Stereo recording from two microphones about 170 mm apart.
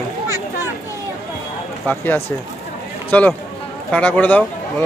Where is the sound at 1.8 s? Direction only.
10° left (ahead or behind).